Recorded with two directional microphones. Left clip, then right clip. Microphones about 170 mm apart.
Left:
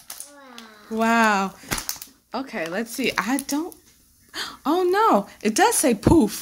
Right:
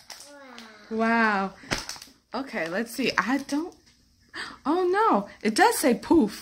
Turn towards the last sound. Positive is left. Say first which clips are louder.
# left 3 dB
turn(degrees=25)  # may be behind; listen again after turning